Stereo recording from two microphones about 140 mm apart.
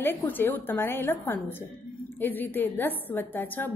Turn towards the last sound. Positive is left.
turn(degrees=15)  # may be behind; listen again after turning